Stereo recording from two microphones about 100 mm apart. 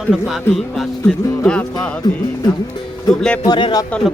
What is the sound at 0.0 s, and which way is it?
Speech, centre (ahead or behind).